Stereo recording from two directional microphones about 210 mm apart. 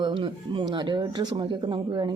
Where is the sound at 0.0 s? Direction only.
25° right (ahead or behind).